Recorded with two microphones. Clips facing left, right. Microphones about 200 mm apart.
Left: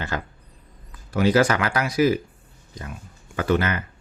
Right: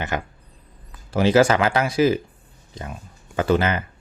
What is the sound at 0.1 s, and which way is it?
Speech, 20° right (ahead or behind).